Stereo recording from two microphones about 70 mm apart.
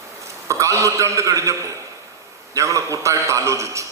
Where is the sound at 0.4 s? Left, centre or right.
Right.